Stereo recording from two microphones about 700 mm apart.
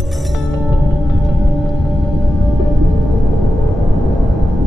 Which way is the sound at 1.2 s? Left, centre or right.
Centre.